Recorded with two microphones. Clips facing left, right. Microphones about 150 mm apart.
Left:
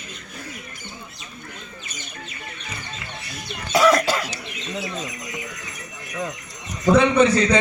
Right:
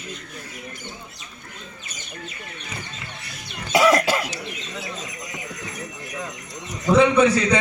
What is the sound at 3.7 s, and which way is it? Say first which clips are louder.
Cough: even; 10° right (ahead or behind).